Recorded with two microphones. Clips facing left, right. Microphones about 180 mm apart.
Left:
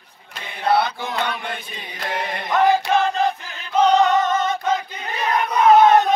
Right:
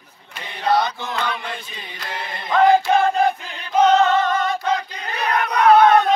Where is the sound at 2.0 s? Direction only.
50° left (ahead or behind).